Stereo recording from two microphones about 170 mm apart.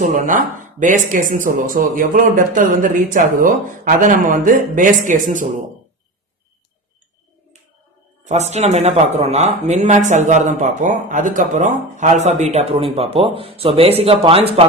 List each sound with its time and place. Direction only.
0.0 s speech: 50° right (ahead or behind)
8.3 s speech: 40° right (ahead or behind)